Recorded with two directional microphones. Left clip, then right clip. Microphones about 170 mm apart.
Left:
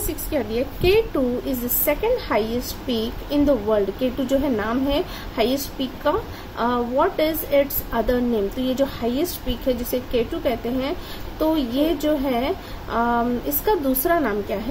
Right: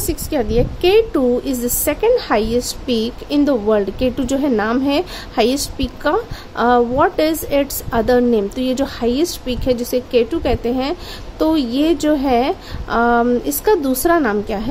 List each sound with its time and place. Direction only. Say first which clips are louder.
0.1 s a woman's voice: right 6 dB; 60° right (ahead or behind)